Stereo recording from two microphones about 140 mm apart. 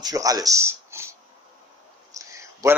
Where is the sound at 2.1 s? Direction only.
20° right (ahead or behind).